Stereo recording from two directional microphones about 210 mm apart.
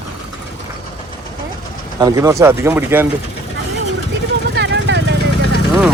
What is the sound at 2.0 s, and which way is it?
Speech, 15° right (ahead or behind).